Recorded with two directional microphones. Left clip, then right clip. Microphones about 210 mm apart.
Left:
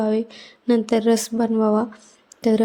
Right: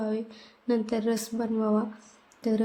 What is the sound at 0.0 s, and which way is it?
A woman's voice, 35° left (ahead or behind).